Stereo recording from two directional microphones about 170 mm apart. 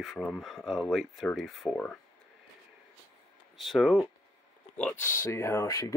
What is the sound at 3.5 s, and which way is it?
Speech, centre (ahead or behind).